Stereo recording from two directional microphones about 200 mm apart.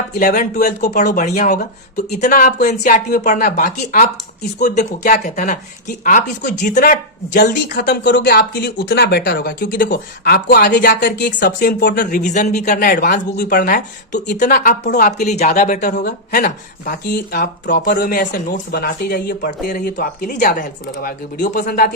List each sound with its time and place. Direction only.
0.2 s speech: 40° left (ahead or behind)